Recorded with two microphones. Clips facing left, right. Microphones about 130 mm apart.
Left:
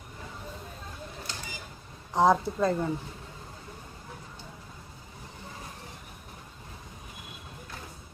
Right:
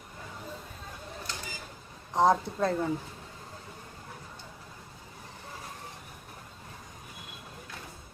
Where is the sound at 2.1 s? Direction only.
Centre (ahead or behind).